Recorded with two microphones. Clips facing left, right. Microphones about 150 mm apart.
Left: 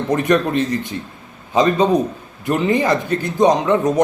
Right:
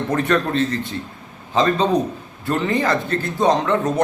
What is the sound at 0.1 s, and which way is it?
Speech, 15° left (ahead or behind).